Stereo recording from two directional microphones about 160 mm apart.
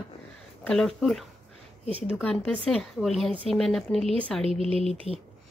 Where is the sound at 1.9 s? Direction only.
35° right (ahead or behind).